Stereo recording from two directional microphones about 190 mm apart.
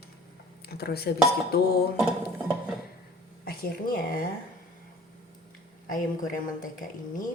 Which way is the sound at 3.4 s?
50° left (ahead or behind).